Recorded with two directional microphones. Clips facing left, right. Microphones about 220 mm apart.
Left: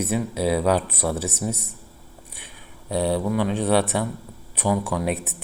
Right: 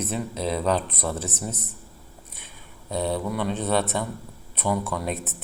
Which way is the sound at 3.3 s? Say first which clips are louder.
Left 4 dB; 5° left (ahead or behind).